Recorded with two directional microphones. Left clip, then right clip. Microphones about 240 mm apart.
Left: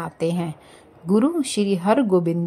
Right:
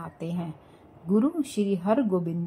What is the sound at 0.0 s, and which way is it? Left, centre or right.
A woman's voice, left.